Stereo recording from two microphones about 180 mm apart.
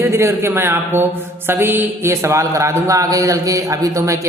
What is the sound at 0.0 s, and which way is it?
A man's voice, 15° right (ahead or behind).